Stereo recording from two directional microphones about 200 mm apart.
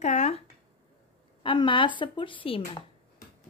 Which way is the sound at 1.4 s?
25° left (ahead or behind).